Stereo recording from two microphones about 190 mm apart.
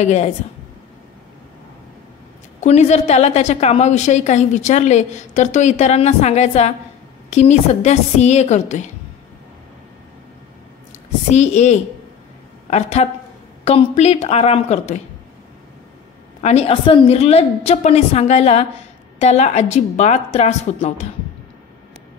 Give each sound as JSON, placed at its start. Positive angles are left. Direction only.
{"t": 0.0, "sound": "a woman's voice", "side_deg": 35}
{"t": 2.6, "sound": "a woman's voice", "side_deg": 35}
{"t": 10.9, "sound": "a woman's voice", "side_deg": 35}
{"t": 16.3, "sound": "a woman's voice", "side_deg": 35}